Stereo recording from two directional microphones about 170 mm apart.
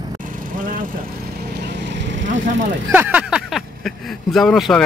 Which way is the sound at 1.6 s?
90° right.